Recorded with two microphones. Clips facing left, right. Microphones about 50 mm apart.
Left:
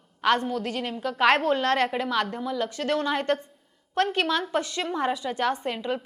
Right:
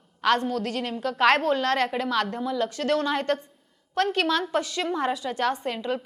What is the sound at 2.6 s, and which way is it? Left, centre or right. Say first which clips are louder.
A woman's voice: right 2 dB; left.